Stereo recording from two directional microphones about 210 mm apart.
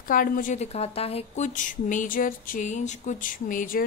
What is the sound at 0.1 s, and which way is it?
Speech, 40° left (ahead or behind).